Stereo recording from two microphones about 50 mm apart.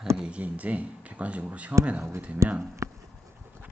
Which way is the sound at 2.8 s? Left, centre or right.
Right.